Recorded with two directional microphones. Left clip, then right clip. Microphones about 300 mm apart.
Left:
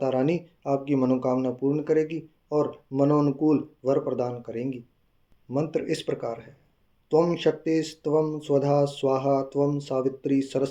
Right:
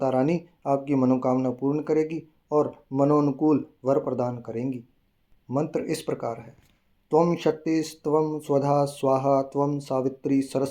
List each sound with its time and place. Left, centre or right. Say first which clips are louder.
0.0 s speech: right 1 dB; right